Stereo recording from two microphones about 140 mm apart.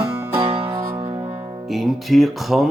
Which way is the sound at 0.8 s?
30° right (ahead or behind).